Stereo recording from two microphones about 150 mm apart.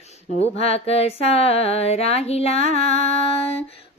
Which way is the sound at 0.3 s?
45° left (ahead or behind).